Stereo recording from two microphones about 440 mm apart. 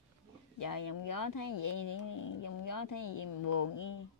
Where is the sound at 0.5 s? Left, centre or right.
Left.